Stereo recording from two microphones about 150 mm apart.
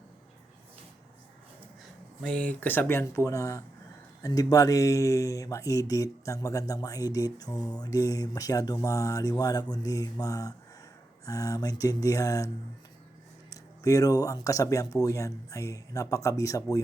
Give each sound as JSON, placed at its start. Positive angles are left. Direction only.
{"t": 2.2, "sound": "speech", "side_deg": 10}
{"t": 13.5, "sound": "speech", "side_deg": 25}